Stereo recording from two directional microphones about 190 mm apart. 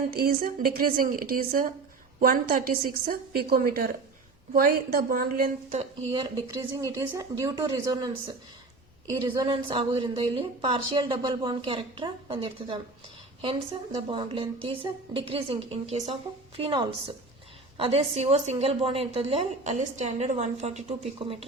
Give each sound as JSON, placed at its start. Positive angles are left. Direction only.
{"t": 0.1, "sound": "a woman's voice", "side_deg": -55}
{"t": 6.1, "sound": "a woman's voice", "side_deg": -25}